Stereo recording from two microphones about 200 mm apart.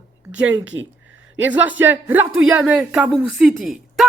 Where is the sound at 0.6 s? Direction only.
70° right (ahead or behind).